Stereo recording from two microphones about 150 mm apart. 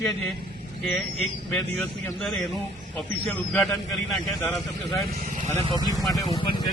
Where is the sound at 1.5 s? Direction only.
5° left (ahead or behind).